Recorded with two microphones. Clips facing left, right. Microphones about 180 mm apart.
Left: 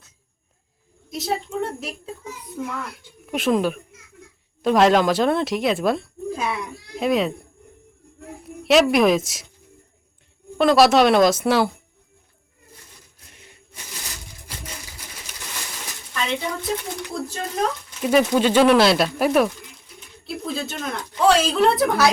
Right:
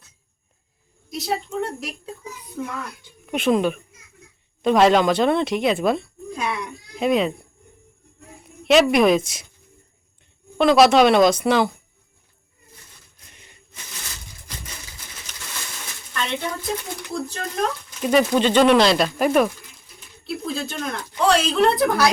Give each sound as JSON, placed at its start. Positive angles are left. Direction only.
{"t": 1.1, "sound": "a child's voice", "side_deg": 0}
{"t": 8.4, "sound": "speech", "side_deg": 0}
{"t": 10.6, "sound": "speech", "side_deg": 0}
{"t": 13.1, "sound": "a sound", "side_deg": 5}
{"t": 16.1, "sound": "speech", "side_deg": 0}